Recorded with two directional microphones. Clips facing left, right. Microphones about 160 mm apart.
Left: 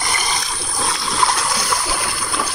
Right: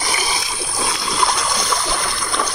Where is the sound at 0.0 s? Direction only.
5° right (ahead or behind).